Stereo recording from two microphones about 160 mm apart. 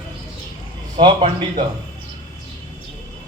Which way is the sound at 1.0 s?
30° right (ahead or behind).